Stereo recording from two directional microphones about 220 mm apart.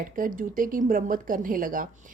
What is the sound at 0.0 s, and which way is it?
Speech, 40° right (ahead or behind).